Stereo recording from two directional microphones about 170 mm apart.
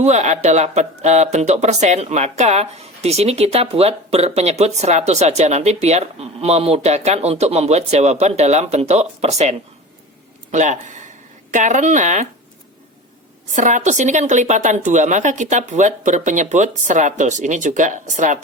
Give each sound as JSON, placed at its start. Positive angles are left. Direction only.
{"t": 0.0, "sound": "a woman's voice", "side_deg": -40}
{"t": 13.5, "sound": "a woman's voice", "side_deg": -45}